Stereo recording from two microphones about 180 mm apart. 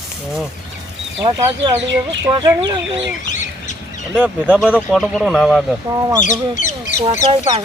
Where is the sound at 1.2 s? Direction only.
25° right (ahead or behind).